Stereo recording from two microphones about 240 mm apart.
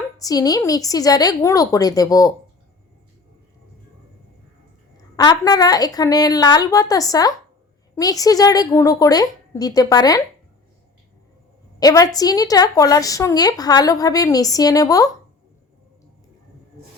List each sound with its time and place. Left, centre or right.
0.2 s a woman's voice: centre
5.1 s a woman's voice: centre
11.8 s a woman's voice: centre